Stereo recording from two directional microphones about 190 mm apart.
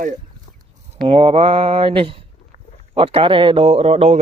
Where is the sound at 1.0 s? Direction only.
30° right (ahead or behind).